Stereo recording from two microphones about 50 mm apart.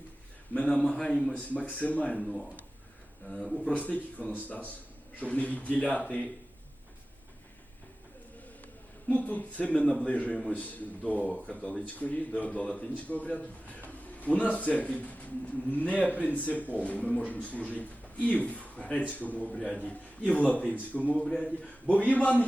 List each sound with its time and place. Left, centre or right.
0.8 s a man's voice: centre
1.3 s speech: left
2.2 s a man's voice: centre
3.6 s speech: left
9.0 s speech: left
9.7 s a man's voice: centre
10.1 s speech: left
19.5 s speech: centre
21.2 s speech: centre